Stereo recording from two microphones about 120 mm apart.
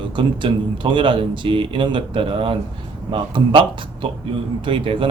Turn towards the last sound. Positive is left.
turn(degrees=-45)  # may be behind; listen again after turning